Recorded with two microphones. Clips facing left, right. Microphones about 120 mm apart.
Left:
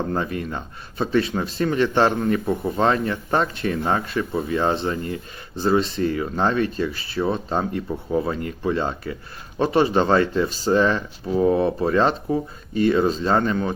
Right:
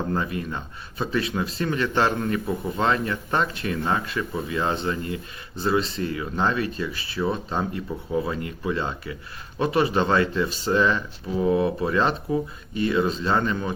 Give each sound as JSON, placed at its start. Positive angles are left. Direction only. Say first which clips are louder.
{"t": 0.1, "sound": "speech", "louder": "left 2 dB", "side_deg": 30}